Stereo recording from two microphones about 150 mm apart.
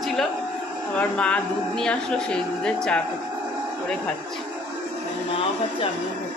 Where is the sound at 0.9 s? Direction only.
5° left (ahead or behind).